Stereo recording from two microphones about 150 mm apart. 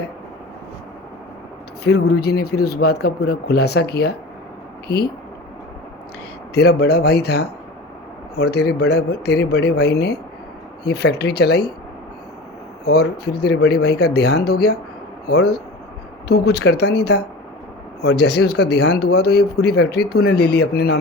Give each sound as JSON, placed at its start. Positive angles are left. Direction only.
{"t": 1.8, "sound": "speech", "side_deg": 90}
{"t": 6.5, "sound": "speech", "side_deg": 90}
{"t": 12.8, "sound": "speech", "side_deg": 90}